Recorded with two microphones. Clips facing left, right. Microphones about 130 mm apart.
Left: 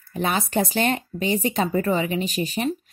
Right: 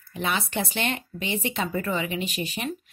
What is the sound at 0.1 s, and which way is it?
Speech, 40° left (ahead or behind).